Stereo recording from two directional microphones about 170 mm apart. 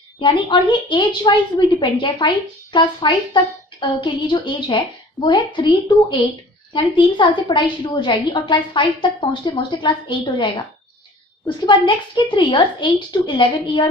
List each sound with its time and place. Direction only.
0.2 s a woman's voice: 30° left (ahead or behind)